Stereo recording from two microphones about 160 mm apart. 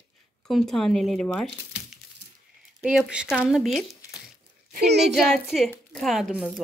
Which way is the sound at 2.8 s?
5° right (ahead or behind).